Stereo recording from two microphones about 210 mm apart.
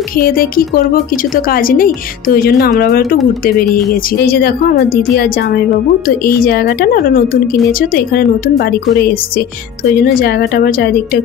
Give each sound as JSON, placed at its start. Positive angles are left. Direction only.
{"t": 0.2, "sound": "a woman's voice", "side_deg": 45}
{"t": 4.2, "sound": "a woman's voice", "side_deg": 45}
{"t": 10.2, "sound": "a woman's voice", "side_deg": 45}